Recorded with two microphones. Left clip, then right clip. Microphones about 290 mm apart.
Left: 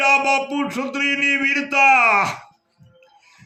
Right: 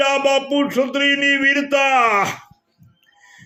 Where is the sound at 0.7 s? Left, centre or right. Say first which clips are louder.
Right 3 dB; left.